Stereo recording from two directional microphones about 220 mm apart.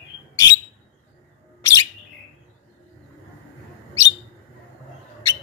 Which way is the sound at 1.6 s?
15° left (ahead or behind).